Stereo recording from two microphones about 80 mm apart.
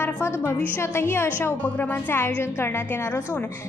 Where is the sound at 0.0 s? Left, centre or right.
Left.